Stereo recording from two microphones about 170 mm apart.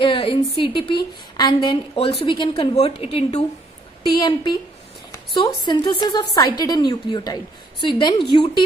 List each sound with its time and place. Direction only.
0.0 s a woman's voice: 30° left (ahead or behind)